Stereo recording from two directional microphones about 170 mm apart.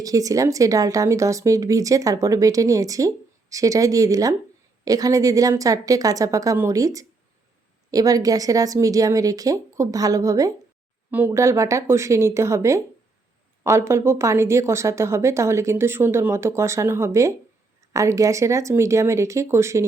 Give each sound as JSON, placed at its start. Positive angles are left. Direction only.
{"t": 0.0, "sound": "a woman's voice", "side_deg": -20}